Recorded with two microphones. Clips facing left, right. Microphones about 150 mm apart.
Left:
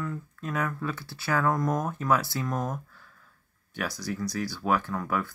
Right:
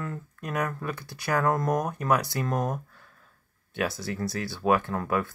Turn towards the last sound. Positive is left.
turn(degrees=-25)  # may be behind; listen again after turning